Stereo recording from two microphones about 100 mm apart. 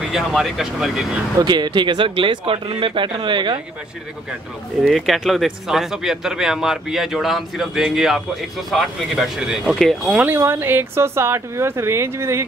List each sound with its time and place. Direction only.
0.1 s speech: 5° right (ahead or behind)
1.4 s speech: 45° right (ahead or behind)
4.8 s speech: centre (ahead or behind)
10.1 s speech: 20° right (ahead or behind)